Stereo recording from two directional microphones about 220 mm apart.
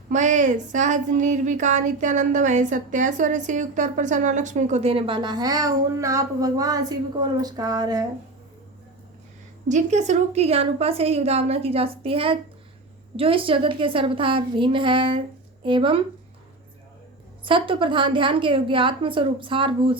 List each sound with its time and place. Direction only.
0.1 s a woman's voice: 35° right (ahead or behind); by 8.0 s 15° right (ahead or behind)
9.6 s a woman's voice: 30° right (ahead or behind)
17.4 s a woman's voice: 25° right (ahead or behind)